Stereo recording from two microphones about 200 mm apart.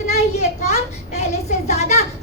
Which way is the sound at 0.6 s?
35° left (ahead or behind).